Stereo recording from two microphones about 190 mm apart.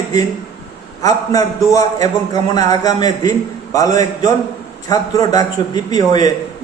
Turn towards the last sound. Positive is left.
turn(degrees=20)  # may be behind; listen again after turning